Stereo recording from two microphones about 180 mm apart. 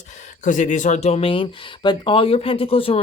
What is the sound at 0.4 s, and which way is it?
Speech, 45° left (ahead or behind).